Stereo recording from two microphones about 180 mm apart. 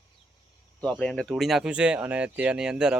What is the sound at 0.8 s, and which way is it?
Speech, 5° left (ahead or behind).